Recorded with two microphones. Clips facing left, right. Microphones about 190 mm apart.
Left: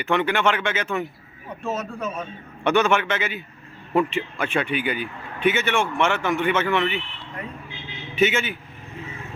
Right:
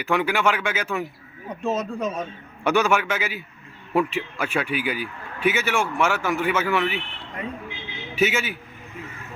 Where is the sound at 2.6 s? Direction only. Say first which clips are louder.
Left 1 dB; 10° right (ahead or behind).